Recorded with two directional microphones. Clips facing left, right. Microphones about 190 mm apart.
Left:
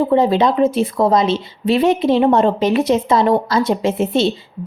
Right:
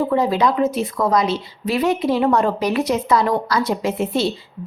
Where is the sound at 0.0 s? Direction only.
25° left (ahead or behind).